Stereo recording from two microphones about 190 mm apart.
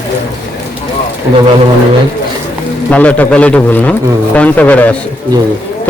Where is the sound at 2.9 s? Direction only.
5° left (ahead or behind).